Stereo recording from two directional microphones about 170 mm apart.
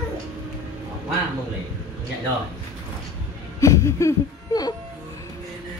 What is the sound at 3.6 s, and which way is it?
Laughter, 15° left (ahead or behind).